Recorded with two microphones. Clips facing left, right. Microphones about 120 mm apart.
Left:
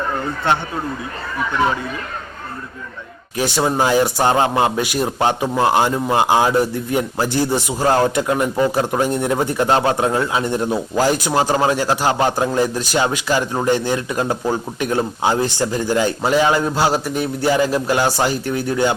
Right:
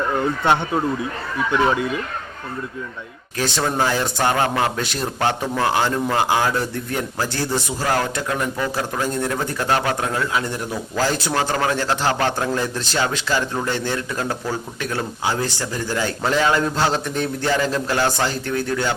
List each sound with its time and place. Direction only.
3.3 s a man's voice: 15° left (ahead or behind)